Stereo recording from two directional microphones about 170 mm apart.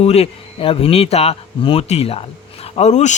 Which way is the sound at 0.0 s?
35° left (ahead or behind).